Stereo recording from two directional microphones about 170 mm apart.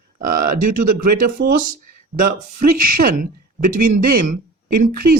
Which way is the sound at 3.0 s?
55° right (ahead or behind).